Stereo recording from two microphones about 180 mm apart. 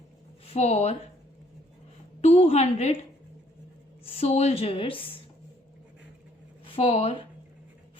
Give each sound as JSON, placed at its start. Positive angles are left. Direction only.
{"t": 0.4, "sound": "speech", "side_deg": 35}
{"t": 2.2, "sound": "a woman's voice", "side_deg": 35}
{"t": 6.7, "sound": "a woman's voice", "side_deg": 35}